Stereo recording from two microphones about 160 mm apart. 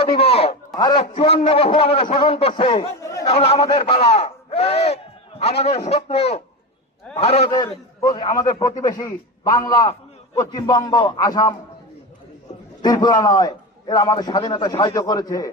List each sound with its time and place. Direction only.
0.0 s a sound: 35° left (ahead or behind)
0.9 s speech: 35° left (ahead or behind)
3.0 s chatter: 20° left (ahead or behind)
3.2 s speech: 40° left (ahead or behind)
7.5 s a man's voice: 25° left (ahead or behind)
12.8 s a man's voice: 25° left (ahead or behind)